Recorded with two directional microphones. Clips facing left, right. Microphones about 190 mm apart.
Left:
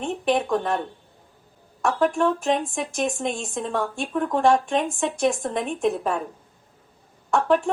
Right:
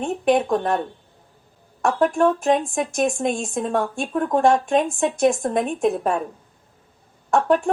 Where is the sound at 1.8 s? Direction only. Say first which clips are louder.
Right 3 dB; 45° right (ahead or behind).